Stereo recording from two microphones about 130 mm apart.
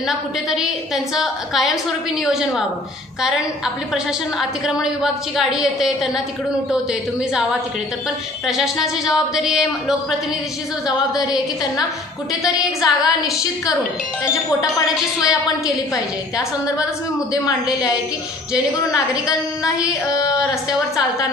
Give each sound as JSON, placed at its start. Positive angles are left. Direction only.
{"t": 0.1, "sound": "a woman's voice", "side_deg": -5}
{"t": 8.5, "sound": "a woman's voice", "side_deg": -5}
{"t": 12.4, "sound": "a woman's voice", "side_deg": -5}
{"t": 15.1, "sound": "a woman's voice", "side_deg": -5}
{"t": 18.9, "sound": "a woman's voice", "side_deg": 25}